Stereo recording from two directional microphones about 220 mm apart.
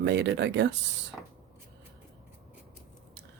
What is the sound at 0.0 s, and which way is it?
Speech, 50° right (ahead or behind).